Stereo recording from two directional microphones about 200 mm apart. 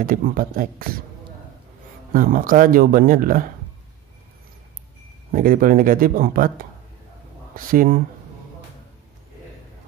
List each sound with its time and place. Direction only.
0.0 s speech: 45° right (ahead or behind)
2.1 s speech: 45° right (ahead or behind)
5.3 s speech: 45° right (ahead or behind)
7.5 s speech: 45° right (ahead or behind)